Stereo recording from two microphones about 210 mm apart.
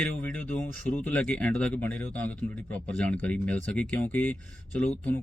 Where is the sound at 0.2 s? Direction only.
5° left (ahead or behind).